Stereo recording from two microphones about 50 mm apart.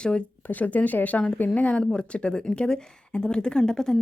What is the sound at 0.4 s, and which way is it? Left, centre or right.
Speech, left.